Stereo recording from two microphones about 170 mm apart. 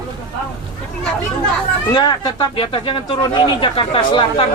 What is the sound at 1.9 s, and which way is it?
Speech, 25° left (ahead or behind).